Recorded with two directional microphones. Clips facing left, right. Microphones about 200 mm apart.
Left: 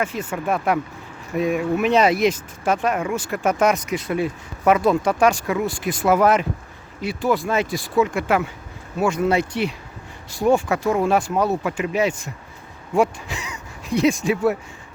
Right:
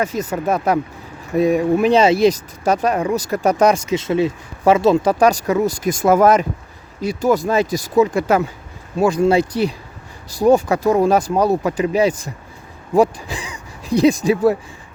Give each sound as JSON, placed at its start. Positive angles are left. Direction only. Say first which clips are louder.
{"t": 0.0, "sound": "speech", "louder": "right 4 dB", "side_deg": -40}
{"t": 5.2, "sound": "speech", "louder": "right 4 dB", "side_deg": -40}